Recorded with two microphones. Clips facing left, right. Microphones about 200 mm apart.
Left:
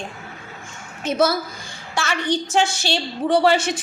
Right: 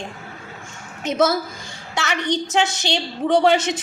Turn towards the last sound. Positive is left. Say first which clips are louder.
# right 1 dB
turn(degrees=-20)  # may be behind; listen again after turning